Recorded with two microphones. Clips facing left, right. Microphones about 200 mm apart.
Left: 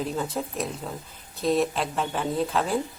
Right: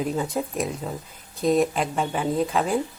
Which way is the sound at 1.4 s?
Centre (ahead or behind).